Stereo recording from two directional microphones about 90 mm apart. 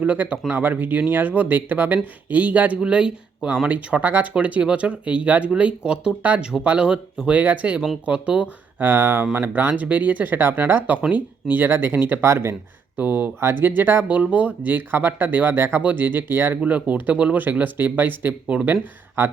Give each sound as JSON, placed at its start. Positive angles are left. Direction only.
{"t": 0.0, "sound": "speech", "side_deg": -15}
{"t": 13.0, "sound": "speech", "side_deg": -20}